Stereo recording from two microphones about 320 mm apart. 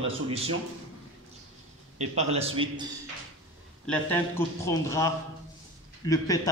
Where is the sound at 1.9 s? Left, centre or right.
Centre.